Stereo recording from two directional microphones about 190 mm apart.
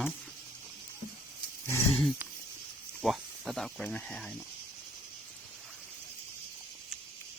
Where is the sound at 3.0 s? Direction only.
Centre (ahead or behind).